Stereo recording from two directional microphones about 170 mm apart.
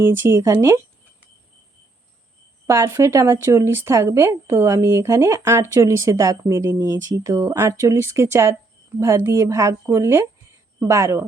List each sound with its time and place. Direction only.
0.0 s speech: 15° right (ahead or behind)
2.6 s speech: 15° right (ahead or behind)